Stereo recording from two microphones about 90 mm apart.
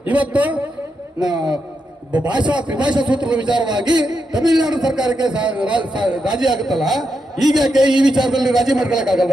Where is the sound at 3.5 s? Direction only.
50° right (ahead or behind).